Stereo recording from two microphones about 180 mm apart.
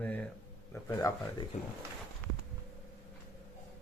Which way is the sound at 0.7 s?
15° left (ahead or behind).